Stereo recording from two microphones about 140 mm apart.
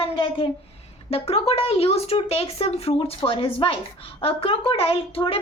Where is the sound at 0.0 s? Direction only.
40° left (ahead or behind).